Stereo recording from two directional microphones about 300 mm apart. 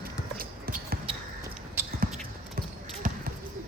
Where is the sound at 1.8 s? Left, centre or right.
Centre.